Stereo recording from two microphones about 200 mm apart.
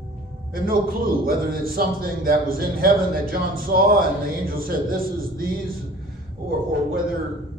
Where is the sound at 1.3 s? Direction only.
45° right (ahead or behind).